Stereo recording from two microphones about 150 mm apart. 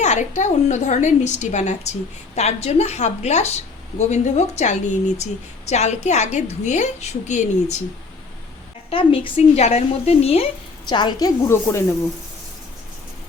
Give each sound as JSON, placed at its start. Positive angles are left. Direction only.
{"t": 0.0, "sound": "a woman's voice", "side_deg": 55}
{"t": 8.9, "sound": "a woman's voice", "side_deg": 40}
{"t": 10.8, "sound": "a woman's voice", "side_deg": 30}